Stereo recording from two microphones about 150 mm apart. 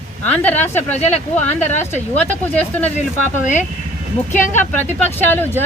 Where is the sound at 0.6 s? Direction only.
50° left (ahead or behind).